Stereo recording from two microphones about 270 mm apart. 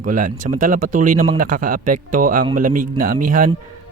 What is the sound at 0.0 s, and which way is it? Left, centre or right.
A man's voice, right.